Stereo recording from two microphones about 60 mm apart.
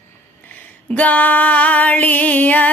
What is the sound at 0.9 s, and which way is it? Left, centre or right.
Music, left.